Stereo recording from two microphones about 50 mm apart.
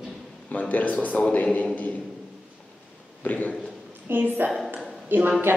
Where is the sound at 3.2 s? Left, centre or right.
Left.